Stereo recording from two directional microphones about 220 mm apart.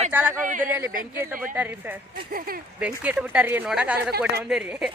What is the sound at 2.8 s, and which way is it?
Speech, 5° right (ahead or behind).